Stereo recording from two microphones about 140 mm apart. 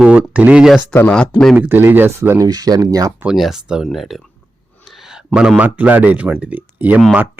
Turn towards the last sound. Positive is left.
turn(degrees=-10)  # may be behind; listen again after turning